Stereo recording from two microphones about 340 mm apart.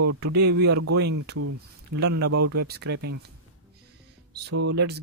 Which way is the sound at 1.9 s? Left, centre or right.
Right.